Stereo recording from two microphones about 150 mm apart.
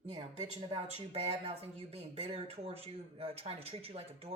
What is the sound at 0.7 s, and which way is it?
Speech, 40° right (ahead or behind).